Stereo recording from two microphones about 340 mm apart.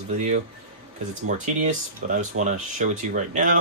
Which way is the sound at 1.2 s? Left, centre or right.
Right.